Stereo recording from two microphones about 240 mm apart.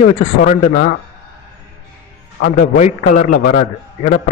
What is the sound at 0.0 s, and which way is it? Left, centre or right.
Speech, left.